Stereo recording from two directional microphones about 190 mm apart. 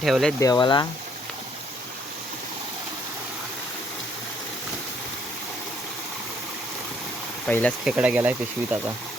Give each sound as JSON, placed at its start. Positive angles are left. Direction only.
{"t": 0.0, "sound": "speech", "side_deg": 0}
{"t": 0.3, "sound": "speech", "side_deg": 20}
{"t": 7.4, "sound": "speech", "side_deg": 5}
{"t": 7.9, "sound": "speech", "side_deg": -5}